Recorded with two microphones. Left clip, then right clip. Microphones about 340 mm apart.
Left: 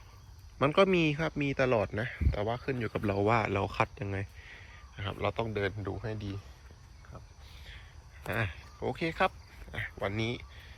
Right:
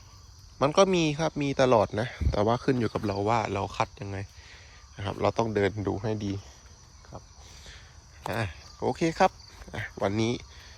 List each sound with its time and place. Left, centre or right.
0.6 s speech: centre
8.2 s speech: centre